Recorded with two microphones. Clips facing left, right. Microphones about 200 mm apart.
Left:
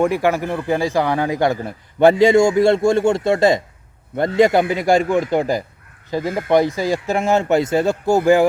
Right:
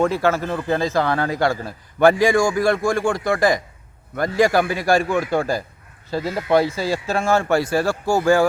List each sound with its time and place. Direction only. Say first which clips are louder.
0.0 s speech: left 2 dB; 15° left (ahead or behind)